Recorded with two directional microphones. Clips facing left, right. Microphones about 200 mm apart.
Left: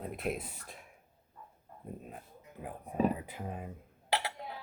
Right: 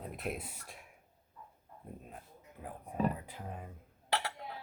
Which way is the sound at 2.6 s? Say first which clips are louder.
Left 3 dB; 10° left (ahead or behind).